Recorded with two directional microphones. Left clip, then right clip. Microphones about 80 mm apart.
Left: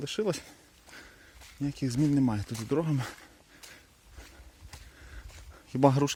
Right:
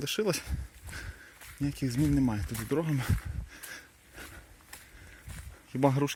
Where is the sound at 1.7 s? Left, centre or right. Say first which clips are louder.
Left 2 dB; left.